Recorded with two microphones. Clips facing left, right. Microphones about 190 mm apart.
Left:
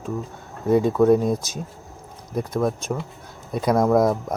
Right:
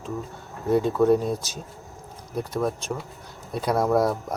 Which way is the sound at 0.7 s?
5° left (ahead or behind).